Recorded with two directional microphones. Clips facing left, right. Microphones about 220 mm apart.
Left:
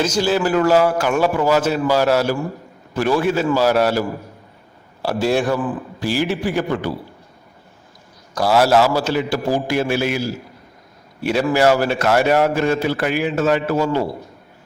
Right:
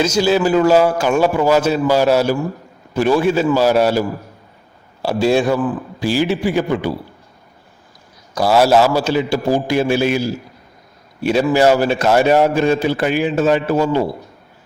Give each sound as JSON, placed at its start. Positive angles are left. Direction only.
{"t": 0.0, "sound": "a man's voice", "side_deg": -10}
{"t": 5.0, "sound": "a man's voice", "side_deg": -15}
{"t": 8.4, "sound": "a man's voice", "side_deg": -10}